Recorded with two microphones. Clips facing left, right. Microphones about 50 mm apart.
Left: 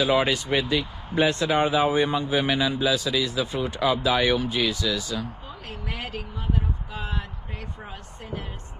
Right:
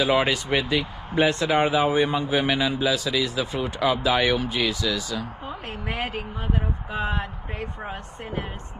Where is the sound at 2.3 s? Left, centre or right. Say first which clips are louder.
Even; right.